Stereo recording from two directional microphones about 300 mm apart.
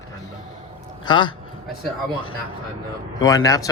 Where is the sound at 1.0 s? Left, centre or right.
Centre.